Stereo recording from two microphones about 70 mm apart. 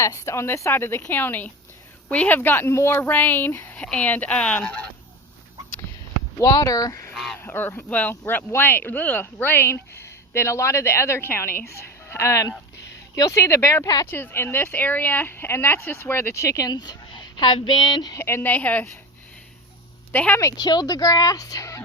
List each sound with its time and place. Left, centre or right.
0.0 s speech: left; by 4.7 s centre
6.4 s speech: left
7.1 s honk: centre
7.4 s speech: left
7.9 s a woman's voice: left
13.8 s speech: left
14.1 s speech: left
16.6 s speech: left
18.2 s speech: left
18.4 s speech: left
20.1 s speech: left
20.4 s a woman's voice: left
20.7 s speech: left